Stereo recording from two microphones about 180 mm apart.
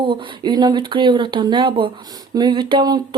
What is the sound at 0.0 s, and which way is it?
Speech, 30° right (ahead or behind).